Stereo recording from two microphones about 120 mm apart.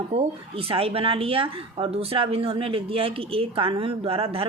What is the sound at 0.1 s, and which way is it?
A woman's voice, 55° right (ahead or behind).